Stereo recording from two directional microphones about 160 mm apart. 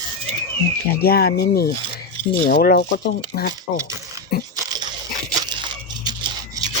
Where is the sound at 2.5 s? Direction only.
65° left (ahead or behind).